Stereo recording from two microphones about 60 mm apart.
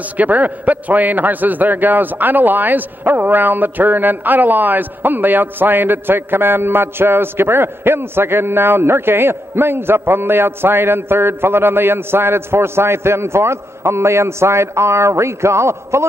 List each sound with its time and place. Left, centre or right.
0.2 s a man's voice: right